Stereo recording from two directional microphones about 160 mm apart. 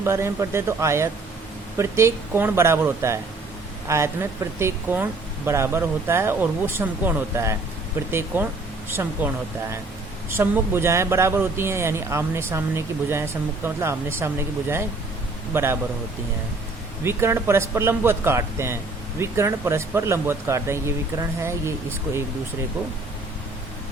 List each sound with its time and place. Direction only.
0.0 s speech: 15° right (ahead or behind)
15.5 s speech: 15° right (ahead or behind)
17.0 s speech: 15° right (ahead or behind)